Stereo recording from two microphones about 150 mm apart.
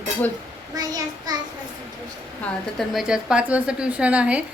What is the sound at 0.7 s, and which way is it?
Child singing, 25° right (ahead or behind).